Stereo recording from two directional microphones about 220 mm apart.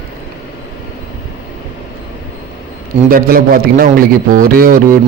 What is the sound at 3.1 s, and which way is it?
A man's voice, 40° right (ahead or behind).